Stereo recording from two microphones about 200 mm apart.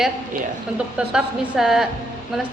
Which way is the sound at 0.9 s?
5° right (ahead or behind).